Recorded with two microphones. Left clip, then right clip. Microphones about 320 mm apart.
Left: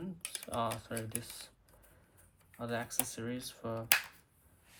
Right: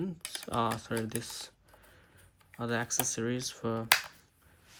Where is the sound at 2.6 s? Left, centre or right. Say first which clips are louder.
Right 6 dB; right.